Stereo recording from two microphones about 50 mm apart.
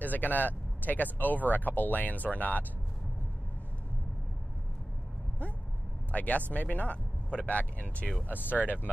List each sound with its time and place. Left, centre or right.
0.0 s speech: left
6.1 s speech: left